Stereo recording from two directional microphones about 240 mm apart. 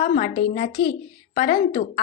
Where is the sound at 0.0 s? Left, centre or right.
Left.